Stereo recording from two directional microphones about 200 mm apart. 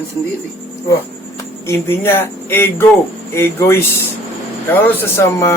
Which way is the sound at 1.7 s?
10° left (ahead or behind).